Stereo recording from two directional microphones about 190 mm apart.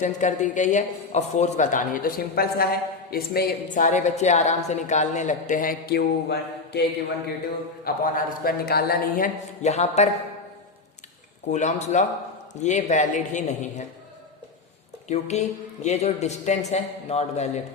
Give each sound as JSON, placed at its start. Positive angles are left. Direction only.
{"t": 0.0, "sound": "a woman's voice", "side_deg": 40}
{"t": 7.9, "sound": "a man's voice", "side_deg": 50}
{"t": 11.5, "sound": "a woman's voice", "side_deg": 40}
{"t": 15.0, "sound": "a woman's voice", "side_deg": 35}